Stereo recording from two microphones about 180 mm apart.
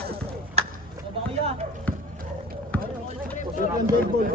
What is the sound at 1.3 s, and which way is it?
Speech, 35° right (ahead or behind).